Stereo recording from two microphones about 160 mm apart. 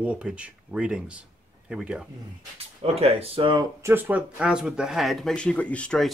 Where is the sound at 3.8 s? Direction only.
15° right (ahead or behind).